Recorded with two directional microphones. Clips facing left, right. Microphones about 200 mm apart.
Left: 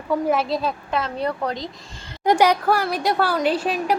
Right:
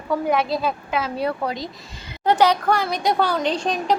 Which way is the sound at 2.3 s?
10° left (ahead or behind).